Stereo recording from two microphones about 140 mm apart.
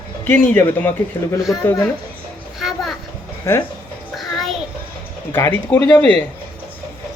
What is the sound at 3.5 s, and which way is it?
Speech, 20° left (ahead or behind).